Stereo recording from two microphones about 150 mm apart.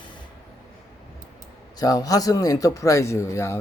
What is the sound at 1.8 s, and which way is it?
Speech, 25° left (ahead or behind).